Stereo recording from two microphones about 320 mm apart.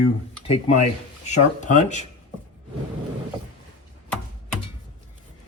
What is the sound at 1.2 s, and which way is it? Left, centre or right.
Speech, left.